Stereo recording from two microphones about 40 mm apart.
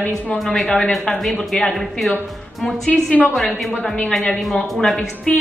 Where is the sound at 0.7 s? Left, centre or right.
Left.